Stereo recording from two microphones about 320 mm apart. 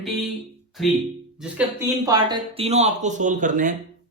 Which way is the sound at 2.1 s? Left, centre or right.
Centre.